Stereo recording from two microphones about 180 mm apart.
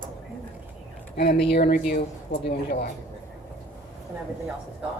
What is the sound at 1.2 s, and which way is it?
Speech, 60° left (ahead or behind).